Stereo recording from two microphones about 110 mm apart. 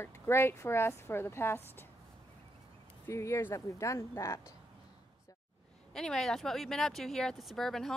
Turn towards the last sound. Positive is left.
turn(degrees=5)  # may be behind; listen again after turning